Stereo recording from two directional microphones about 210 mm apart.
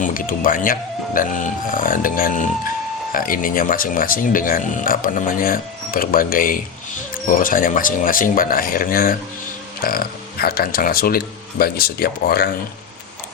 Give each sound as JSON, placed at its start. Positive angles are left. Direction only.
{"t": 0.0, "sound": "speech", "side_deg": 40}